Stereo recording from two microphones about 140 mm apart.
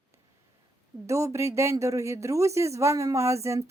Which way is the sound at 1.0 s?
20° right (ahead or behind).